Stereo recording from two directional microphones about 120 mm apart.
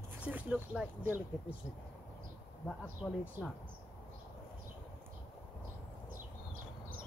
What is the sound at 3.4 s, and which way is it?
Speech, 15° right (ahead or behind).